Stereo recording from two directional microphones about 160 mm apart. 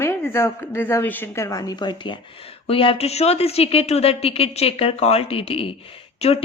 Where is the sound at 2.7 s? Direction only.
35° left (ahead or behind).